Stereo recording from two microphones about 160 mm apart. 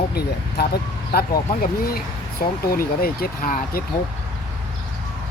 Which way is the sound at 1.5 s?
65° left (ahead or behind).